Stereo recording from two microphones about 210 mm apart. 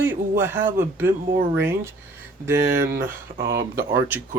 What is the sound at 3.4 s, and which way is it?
Speech, 45° right (ahead or behind).